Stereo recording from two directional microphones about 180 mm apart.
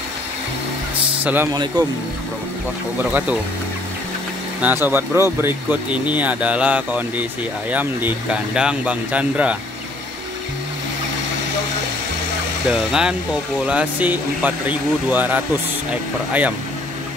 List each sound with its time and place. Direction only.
1.2 s speech: 10° right (ahead or behind)
1.5 s speech: 25° right (ahead or behind)
3.0 s speech: 10° right (ahead or behind)
4.6 s speech: 10° right (ahead or behind)
12.6 s speech: 5° right (ahead or behind)